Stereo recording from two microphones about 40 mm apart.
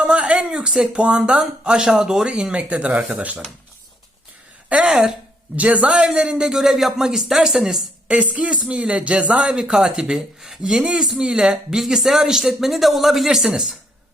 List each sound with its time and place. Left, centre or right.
0.0 s a sound: right
0.3 s a sound: centre
1.0 s speech: right
2.3 s speech: right
4.9 s speech: centre
5.5 s speech: right
6.3 s speech: centre
8.0 s speech: right; by 13.7 s centre